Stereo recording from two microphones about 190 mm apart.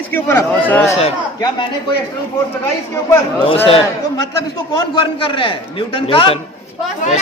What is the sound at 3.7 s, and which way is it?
A man's voice, 30° left (ahead or behind).